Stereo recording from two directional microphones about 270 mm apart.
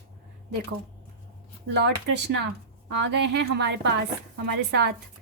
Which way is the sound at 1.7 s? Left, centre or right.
Right.